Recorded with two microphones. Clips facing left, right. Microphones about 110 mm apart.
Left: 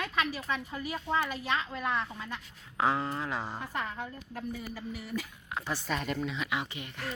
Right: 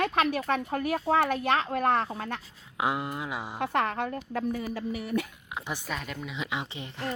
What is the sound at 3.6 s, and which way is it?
Speech, 70° right (ahead or behind).